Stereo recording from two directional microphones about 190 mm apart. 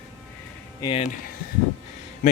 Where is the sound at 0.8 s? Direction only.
25° left (ahead or behind).